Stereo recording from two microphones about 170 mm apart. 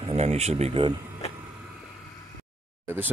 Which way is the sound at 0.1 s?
40° right (ahead or behind).